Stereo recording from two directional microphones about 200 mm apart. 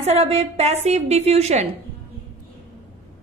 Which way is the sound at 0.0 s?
30° right (ahead or behind).